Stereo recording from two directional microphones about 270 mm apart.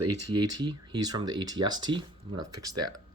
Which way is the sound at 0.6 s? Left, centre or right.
Centre.